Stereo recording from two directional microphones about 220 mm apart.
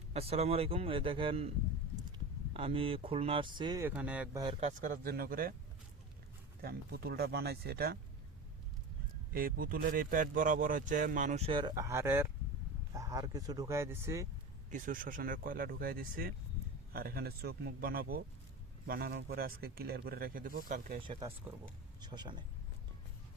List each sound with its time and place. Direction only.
0.1 s speech: 25° right (ahead or behind); by 4.3 s 5° right (ahead or behind)
4.4 s speech: 20° right (ahead or behind)
4.8 s a man's voice: 40° right (ahead or behind)
6.6 s speech: 45° right (ahead or behind)
9.3 s a man's voice: 40° right (ahead or behind); by 14.3 s 10° right (ahead or behind)
14.7 s a man's voice: 35° right (ahead or behind)
21.1 s speech: 25° right (ahead or behind)